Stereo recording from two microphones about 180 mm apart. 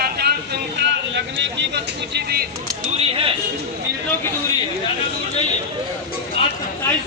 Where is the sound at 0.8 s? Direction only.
80° right; by 2.5 s 60° right (ahead or behind).